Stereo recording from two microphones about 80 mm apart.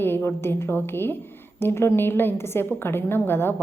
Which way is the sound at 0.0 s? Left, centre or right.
Left.